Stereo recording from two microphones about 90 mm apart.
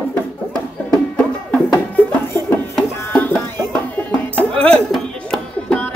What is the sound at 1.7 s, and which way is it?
Music, 20° left (ahead or behind).